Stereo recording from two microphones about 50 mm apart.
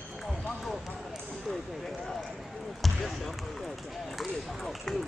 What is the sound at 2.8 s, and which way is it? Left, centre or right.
Basketball bounce, centre.